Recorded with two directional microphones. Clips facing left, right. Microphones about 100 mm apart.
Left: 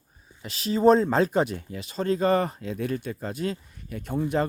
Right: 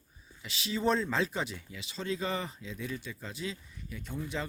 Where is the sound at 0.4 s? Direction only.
45° left (ahead or behind).